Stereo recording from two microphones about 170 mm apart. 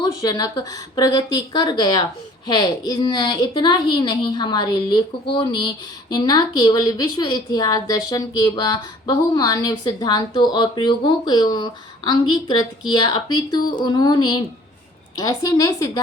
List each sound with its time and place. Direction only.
0.0 s a woman's voice: 25° left (ahead or behind)